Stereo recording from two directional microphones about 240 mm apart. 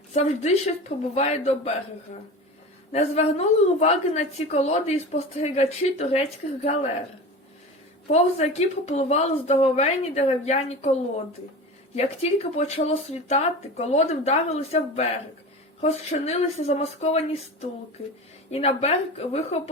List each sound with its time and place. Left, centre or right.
0.1 s a woman's voice: left
2.9 s a woman's voice: left
8.1 s a woman's voice: left
11.9 s a woman's voice: left